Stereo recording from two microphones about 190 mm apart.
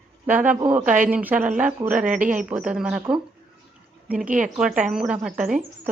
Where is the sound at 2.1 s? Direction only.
45° right (ahead or behind).